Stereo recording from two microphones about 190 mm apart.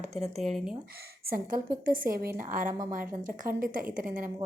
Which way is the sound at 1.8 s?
50° right (ahead or behind).